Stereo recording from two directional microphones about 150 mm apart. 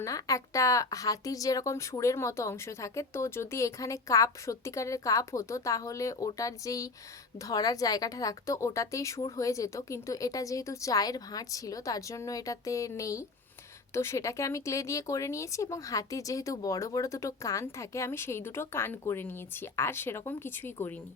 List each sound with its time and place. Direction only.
0.0 s a woman's voice: 20° left (ahead or behind)